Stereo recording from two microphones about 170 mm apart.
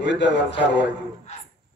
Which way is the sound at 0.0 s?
90° left.